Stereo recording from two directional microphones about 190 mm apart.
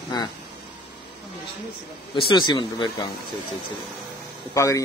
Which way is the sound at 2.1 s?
25° left (ahead or behind).